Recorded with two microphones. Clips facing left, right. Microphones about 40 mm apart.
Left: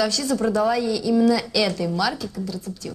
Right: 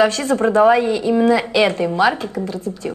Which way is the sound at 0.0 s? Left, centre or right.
Right.